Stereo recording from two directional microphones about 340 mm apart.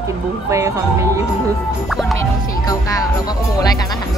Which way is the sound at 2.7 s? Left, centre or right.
Centre.